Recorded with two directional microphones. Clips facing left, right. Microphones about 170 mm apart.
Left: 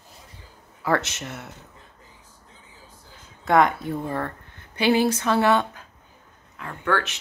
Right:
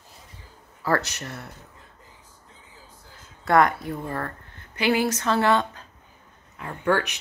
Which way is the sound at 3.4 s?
20° left (ahead or behind).